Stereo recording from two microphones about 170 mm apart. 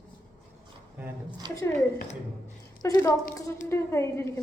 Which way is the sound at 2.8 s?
20° left (ahead or behind).